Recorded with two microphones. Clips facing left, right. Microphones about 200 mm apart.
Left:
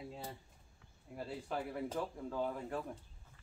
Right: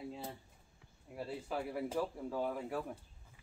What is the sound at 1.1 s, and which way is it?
Speech, 5° right (ahead or behind).